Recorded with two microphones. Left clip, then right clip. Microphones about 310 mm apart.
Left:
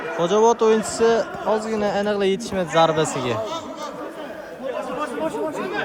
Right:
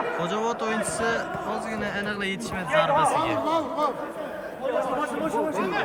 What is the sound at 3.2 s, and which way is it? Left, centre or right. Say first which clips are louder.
Speech: right 1 dB; centre.